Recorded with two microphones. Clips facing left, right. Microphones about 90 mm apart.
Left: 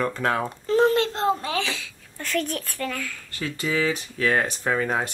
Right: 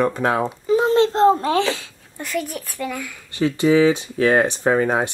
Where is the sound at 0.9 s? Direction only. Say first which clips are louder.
Right 8 dB; 30° right (ahead or behind).